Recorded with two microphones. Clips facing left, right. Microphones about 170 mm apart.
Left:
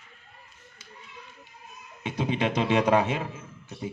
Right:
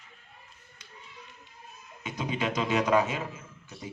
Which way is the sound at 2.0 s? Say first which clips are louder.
Left 4 dB; 30° left (ahead or behind).